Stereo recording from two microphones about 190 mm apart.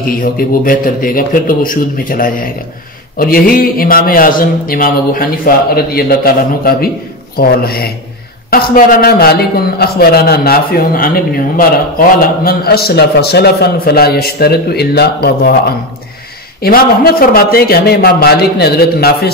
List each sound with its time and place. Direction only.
0.1 s a man's voice: 50° left (ahead or behind)
16.6 s a man's voice: 50° left (ahead or behind)